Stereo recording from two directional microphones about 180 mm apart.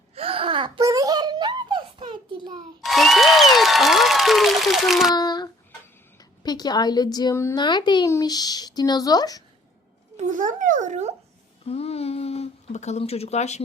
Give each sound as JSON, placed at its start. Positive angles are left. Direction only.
{"t": 0.2, "sound": "wail", "side_deg": -30}
{"t": 0.8, "sound": "a sound", "side_deg": -20}
{"t": 2.8, "sound": "applause", "side_deg": 0}
{"t": 5.1, "sound": "a sound", "side_deg": 25}
{"t": 6.4, "sound": "a woman's voice", "side_deg": 20}
{"t": 10.2, "sound": "a child's voice", "side_deg": -45}
{"t": 11.6, "sound": "speech", "side_deg": 35}